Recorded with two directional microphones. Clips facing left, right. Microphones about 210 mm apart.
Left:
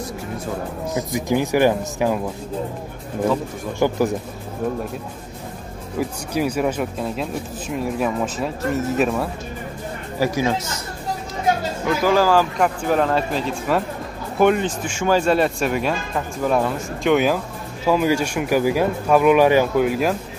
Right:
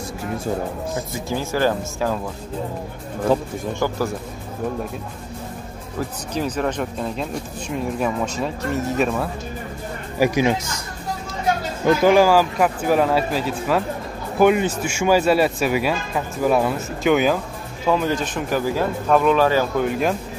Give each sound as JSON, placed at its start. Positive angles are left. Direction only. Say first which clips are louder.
{"t": 0.9, "sound": "speech", "louder": "left 9 dB", "side_deg": 15}
{"t": 3.8, "sound": "speech", "louder": "left 5 dB", "side_deg": 20}
{"t": 5.9, "sound": "speech", "louder": "left 3 dB", "side_deg": 10}
{"t": 10.1, "sound": "speech", "louder": "right 2 dB", "side_deg": -15}
{"t": 12.0, "sound": "speech", "louder": "right 1 dB", "side_deg": -15}
{"t": 19.9, "sound": "speech", "louder": "left 1 dB", "side_deg": 5}